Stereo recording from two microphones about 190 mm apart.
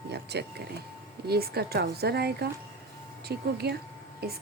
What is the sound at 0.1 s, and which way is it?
Vehicle, 60° right (ahead or behind).